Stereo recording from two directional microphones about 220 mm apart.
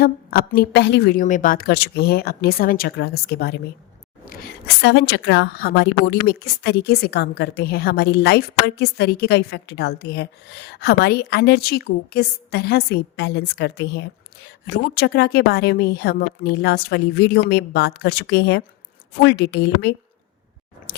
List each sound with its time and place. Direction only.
0.0 s a woman's voice: 45° left (ahead or behind)